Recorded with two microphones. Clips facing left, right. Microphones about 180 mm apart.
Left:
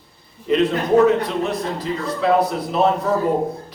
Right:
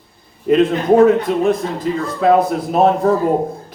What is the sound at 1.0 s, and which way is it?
A man's voice, 50° right (ahead or behind).